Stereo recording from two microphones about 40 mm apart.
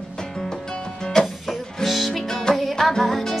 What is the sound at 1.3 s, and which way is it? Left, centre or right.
Music, centre.